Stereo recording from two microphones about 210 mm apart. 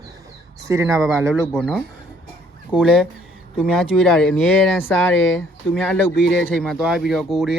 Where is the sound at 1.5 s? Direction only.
5° left (ahead or behind).